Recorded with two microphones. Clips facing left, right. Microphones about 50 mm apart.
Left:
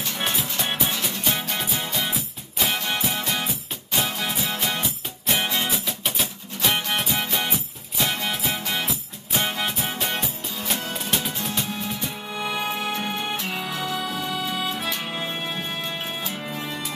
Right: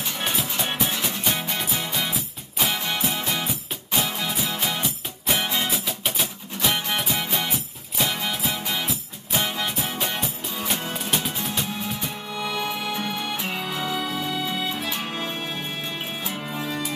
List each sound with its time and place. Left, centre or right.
0.2 s music: centre
3.0 s music: centre
12.3 s music: centre
13.7 s music: centre
16.2 s music: centre